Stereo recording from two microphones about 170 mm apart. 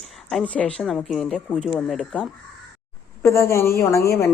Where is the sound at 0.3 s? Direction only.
5° left (ahead or behind).